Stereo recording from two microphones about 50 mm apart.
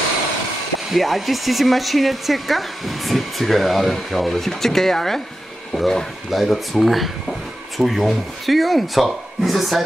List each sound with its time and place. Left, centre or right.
0.9 s speech: centre